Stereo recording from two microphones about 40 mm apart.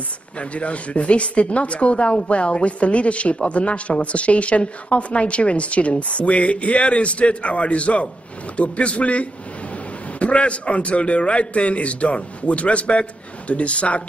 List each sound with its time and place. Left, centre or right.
0.4 s a woman's voice: left